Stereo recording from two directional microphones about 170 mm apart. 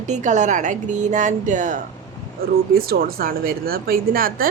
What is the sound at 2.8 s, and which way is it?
A woman's voice, 65° right (ahead or behind).